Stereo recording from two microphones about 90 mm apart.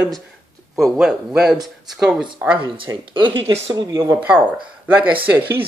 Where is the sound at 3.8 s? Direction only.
55° right (ahead or behind).